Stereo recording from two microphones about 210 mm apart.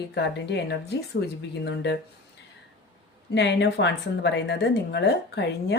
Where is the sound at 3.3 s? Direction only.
55° left (ahead or behind).